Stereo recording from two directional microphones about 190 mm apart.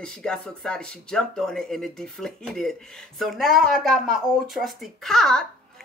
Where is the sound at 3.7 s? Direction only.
50° right (ahead or behind).